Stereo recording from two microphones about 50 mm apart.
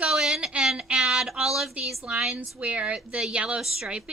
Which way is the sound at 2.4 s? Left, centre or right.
Right.